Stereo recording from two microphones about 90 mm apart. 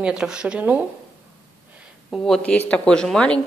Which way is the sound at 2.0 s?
5° left (ahead or behind).